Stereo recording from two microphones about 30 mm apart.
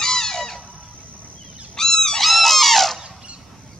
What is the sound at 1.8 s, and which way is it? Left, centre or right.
Goose, centre.